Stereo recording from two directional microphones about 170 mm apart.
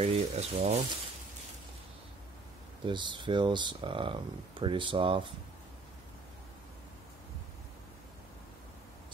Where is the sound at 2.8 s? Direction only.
30° right (ahead or behind).